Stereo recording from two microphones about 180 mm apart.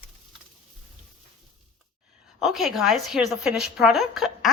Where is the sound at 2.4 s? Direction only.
Centre (ahead or behind).